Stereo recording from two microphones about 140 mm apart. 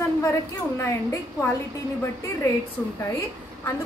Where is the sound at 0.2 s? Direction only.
20° left (ahead or behind).